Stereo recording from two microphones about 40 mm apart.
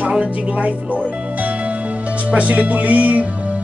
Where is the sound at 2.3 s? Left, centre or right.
Right.